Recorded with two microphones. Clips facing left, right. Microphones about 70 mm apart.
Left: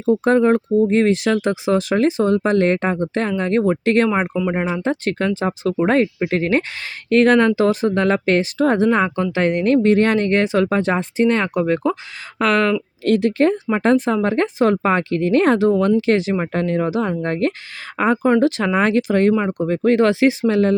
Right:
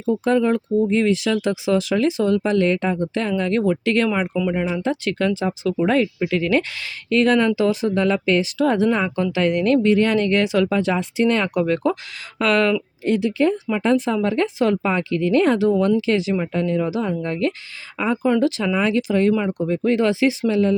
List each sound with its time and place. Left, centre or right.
0.0 s speech: left
4.3 s speech: left
4.8 s speech: left
12.4 s speech: left
13.1 s speech: left
13.7 s speech: left